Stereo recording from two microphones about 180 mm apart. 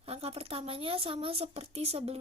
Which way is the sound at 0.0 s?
35° right (ahead or behind).